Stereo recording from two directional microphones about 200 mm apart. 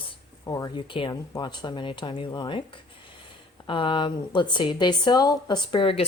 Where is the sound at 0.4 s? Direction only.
20° left (ahead or behind).